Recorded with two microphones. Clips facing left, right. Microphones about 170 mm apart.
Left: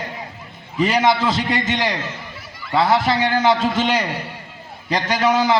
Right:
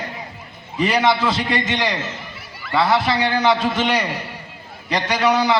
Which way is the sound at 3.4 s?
20° left (ahead or behind).